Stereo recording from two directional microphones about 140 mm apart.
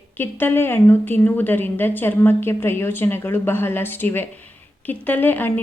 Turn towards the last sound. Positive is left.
turn(degrees=15)  # may be behind; listen again after turning